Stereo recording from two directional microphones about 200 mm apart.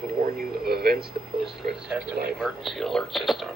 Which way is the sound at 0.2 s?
50° right (ahead or behind).